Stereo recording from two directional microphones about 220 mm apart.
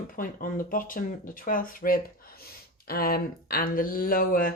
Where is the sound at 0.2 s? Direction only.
40° left (ahead or behind).